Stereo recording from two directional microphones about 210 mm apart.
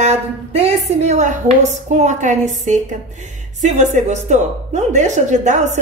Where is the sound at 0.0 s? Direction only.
30° right (ahead or behind).